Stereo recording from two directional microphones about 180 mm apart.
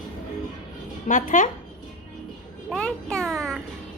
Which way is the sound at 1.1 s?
45° left (ahead or behind).